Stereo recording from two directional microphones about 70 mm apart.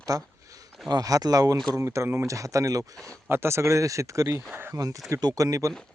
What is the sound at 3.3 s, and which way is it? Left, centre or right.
Speech, right.